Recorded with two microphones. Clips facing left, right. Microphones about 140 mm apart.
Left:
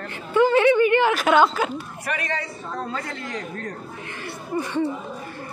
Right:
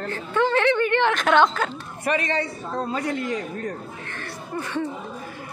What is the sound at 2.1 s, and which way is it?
A man's voice, 25° right (ahead or behind).